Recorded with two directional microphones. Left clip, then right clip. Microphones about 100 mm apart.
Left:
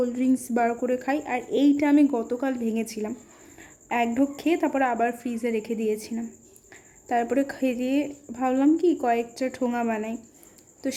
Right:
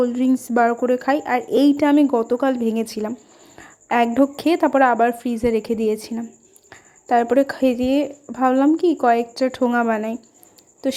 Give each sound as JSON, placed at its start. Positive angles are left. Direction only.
{"t": 0.0, "sound": "a woman's voice", "side_deg": -20}